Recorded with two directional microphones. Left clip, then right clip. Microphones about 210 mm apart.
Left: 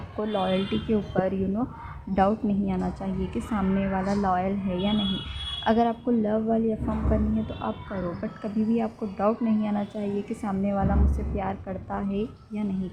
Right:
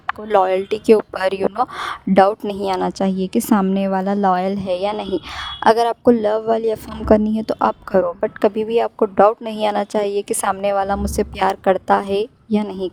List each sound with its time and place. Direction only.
0.3 s a woman's voice: 55° right (ahead or behind)